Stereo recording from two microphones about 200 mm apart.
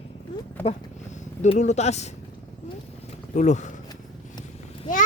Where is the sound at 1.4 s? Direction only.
35° left (ahead or behind).